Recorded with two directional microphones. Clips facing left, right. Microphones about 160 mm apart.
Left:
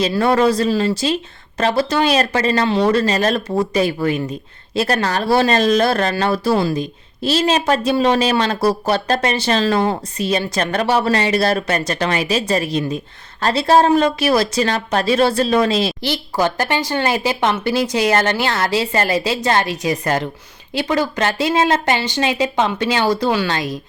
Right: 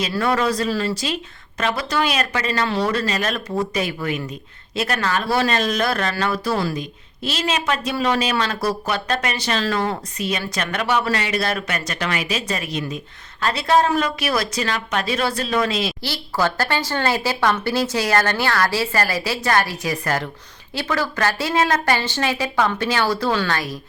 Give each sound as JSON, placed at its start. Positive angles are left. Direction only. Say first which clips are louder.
{"t": 0.0, "sound": "speech", "louder": "left 6 dB", "side_deg": 30}
{"t": 2.6, "sound": "speech", "louder": "left 6 dB", "side_deg": 25}
{"t": 16.0, "sound": "speech", "louder": "left 3 dB", "side_deg": 20}